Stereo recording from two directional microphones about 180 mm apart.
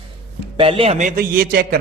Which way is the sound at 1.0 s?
50° right (ahead or behind).